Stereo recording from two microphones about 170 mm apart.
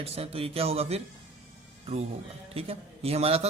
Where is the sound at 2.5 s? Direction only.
35° right (ahead or behind).